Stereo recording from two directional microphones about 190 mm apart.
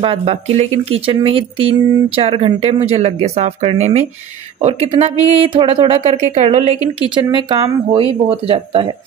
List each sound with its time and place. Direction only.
0.0 s speech: 30° right (ahead or behind)